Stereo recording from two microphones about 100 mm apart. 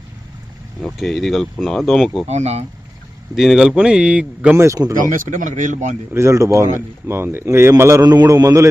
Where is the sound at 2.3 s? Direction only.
90° right.